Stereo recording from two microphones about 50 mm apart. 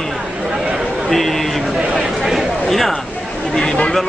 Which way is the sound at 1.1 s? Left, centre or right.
Centre.